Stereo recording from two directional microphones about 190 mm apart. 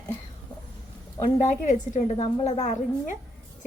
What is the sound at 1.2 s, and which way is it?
A woman's voice, 40° left (ahead or behind).